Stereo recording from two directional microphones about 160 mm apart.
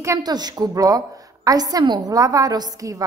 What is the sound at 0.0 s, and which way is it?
A woman's voice, 20° right (ahead or behind).